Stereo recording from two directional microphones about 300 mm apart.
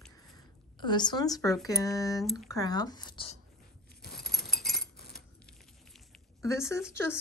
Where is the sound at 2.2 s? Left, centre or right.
Centre.